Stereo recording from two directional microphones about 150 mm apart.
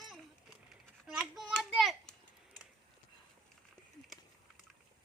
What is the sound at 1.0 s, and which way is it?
A child's voice, centre (ahead or behind).